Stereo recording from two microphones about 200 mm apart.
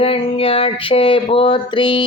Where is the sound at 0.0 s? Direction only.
30° left (ahead or behind).